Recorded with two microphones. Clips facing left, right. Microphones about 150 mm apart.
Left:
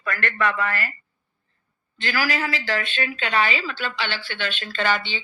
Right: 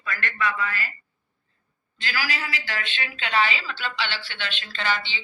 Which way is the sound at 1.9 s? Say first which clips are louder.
Left 5 dB; 50° left (ahead or behind).